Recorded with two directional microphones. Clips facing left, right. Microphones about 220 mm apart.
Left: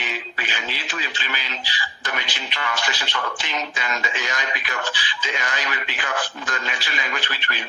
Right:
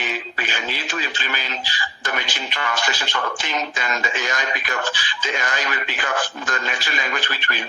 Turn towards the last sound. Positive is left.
turn(degrees=-45)  # may be behind; listen again after turning